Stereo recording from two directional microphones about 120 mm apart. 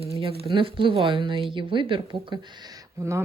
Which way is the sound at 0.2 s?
50° right (ahead or behind).